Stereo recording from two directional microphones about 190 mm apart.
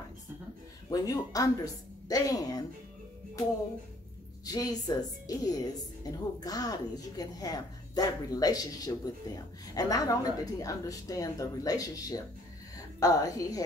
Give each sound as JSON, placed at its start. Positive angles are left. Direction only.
{"t": 0.8, "sound": "a woman's voice", "side_deg": 20}
{"t": 4.5, "sound": "a woman's voice", "side_deg": 20}